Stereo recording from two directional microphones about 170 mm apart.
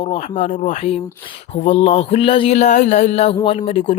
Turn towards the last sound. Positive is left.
turn(degrees=40)  # may be behind; listen again after turning